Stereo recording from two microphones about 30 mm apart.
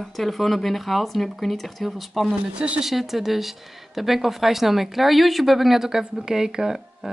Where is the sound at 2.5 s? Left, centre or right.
Right.